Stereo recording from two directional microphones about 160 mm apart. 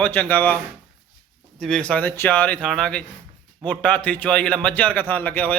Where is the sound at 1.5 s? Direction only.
5° left (ahead or behind).